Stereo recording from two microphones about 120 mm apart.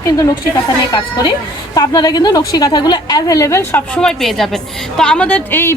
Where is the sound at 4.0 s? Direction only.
5° left (ahead or behind).